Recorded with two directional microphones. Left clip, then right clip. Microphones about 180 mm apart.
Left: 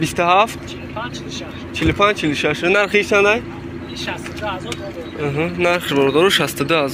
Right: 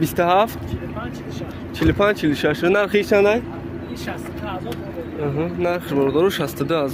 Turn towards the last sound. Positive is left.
turn(degrees=-5)  # may be behind; listen again after turning